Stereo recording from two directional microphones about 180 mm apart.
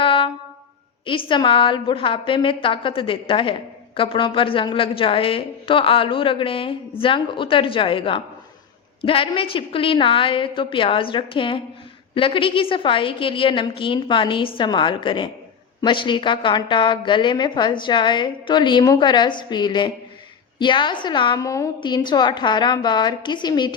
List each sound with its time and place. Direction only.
0.0 s music: 30° left (ahead or behind)
1.0 s a woman's voice: 30° left (ahead or behind)